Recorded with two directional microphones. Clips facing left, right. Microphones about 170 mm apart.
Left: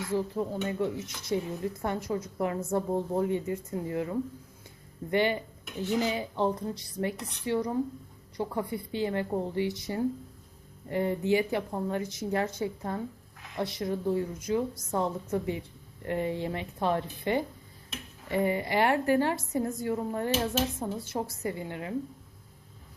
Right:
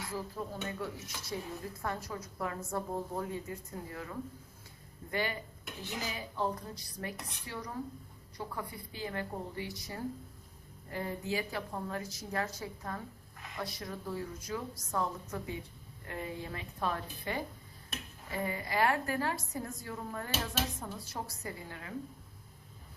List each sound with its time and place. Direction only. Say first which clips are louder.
0.1 s a woman's voice: left 11 dB; 25° left (ahead or behind)
10.9 s a woman's voice: left 10 dB; 25° left (ahead or behind)